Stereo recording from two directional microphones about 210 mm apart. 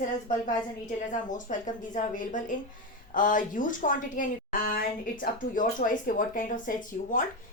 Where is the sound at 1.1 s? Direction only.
35° left (ahead or behind).